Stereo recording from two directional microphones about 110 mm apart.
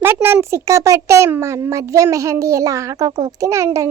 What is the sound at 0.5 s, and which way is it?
A child's voice, 25° right (ahead or behind).